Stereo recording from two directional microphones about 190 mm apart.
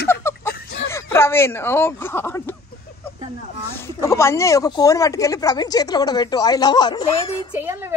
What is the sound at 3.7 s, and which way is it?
A woman's voice, 15° left (ahead or behind).